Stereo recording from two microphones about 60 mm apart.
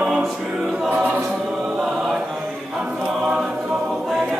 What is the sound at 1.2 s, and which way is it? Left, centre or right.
Choir, centre.